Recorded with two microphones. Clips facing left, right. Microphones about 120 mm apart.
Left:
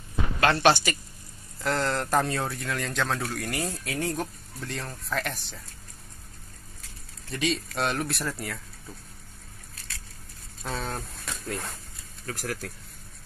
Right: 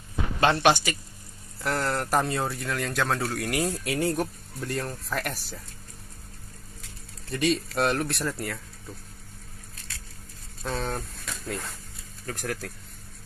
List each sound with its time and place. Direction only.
0.4 s speech: 15° right (ahead or behind)
7.2 s speech: centre (ahead or behind)
10.6 s speech: centre (ahead or behind)